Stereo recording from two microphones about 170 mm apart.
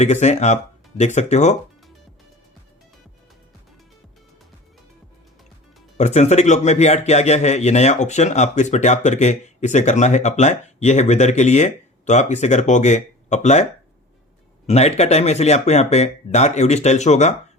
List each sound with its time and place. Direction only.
0.0 s a man's voice: 40° left (ahead or behind)
6.0 s a man's voice: 40° left (ahead or behind)
14.7 s speech: 40° left (ahead or behind)